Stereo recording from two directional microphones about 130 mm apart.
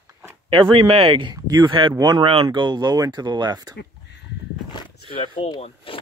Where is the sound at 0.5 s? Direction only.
40° right (ahead or behind).